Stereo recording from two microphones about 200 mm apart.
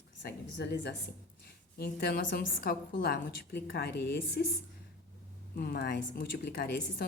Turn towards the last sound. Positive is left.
turn(degrees=50)  # may be behind; listen again after turning